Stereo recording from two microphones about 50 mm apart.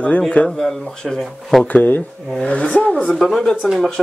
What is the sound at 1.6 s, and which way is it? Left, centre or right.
Speech, left.